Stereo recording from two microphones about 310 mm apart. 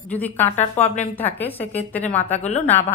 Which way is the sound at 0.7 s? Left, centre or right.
Left.